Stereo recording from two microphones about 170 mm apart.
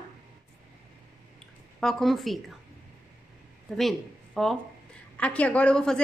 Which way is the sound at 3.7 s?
Centre (ahead or behind).